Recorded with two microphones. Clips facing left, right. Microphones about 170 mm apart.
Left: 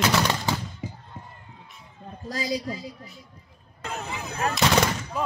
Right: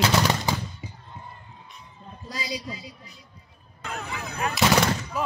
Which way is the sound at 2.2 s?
50° left (ahead or behind).